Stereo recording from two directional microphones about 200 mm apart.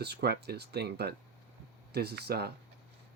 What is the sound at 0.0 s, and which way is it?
Speech, 55° right (ahead or behind).